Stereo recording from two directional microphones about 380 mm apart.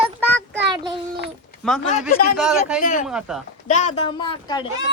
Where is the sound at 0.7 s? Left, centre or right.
Centre.